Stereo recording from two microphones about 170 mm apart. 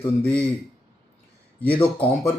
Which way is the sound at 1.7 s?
30° left (ahead or behind).